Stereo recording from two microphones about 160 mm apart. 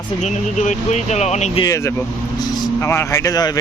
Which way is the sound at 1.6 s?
20° left (ahead or behind).